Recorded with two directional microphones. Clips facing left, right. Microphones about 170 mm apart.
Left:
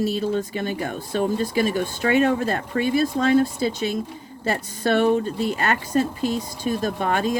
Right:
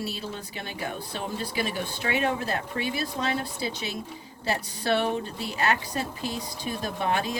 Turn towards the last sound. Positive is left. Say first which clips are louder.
# left 5 dB
turn(degrees=50)  # may be behind; listen again after turning